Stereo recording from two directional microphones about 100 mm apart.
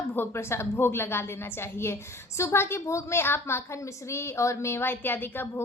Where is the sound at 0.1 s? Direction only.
25° left (ahead or behind).